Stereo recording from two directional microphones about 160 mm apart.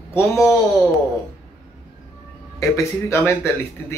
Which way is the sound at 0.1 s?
15° left (ahead or behind).